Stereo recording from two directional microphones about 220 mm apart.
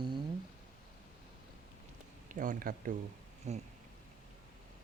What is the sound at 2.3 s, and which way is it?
Speech, 40° right (ahead or behind).